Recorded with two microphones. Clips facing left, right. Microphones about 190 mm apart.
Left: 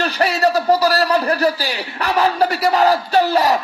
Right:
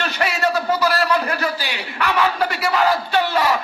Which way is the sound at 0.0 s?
35° left (ahead or behind).